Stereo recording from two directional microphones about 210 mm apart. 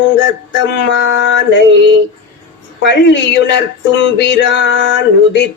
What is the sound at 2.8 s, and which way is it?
A man's voice, 55° left (ahead or behind).